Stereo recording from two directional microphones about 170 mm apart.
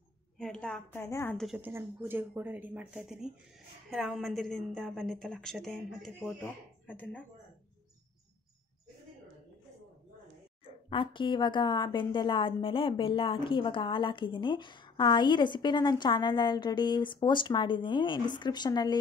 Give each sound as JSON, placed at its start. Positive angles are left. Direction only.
{"t": 0.4, "sound": "a woman's voice", "side_deg": 5}
{"t": 1.3, "sound": "a woman's voice", "side_deg": 0}
{"t": 1.6, "sound": "a woman's voice", "side_deg": -15}
{"t": 10.6, "sound": "a woman's voice", "side_deg": 30}